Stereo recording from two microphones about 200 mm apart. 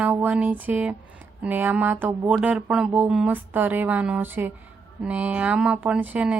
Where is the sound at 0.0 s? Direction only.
10° right (ahead or behind).